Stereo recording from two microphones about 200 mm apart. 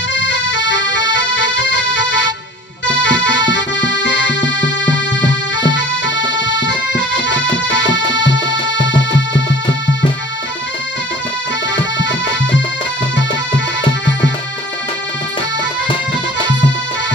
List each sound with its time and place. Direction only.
0.1 s music: 65° left (ahead or behind)
11.7 s accordion: 65° left (ahead or behind)